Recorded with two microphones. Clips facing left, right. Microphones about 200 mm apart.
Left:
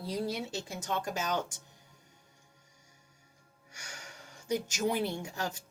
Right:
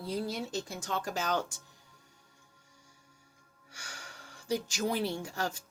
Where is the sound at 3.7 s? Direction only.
20° left (ahead or behind).